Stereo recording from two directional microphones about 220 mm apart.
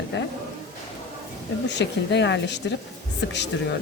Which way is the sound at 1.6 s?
50° left (ahead or behind).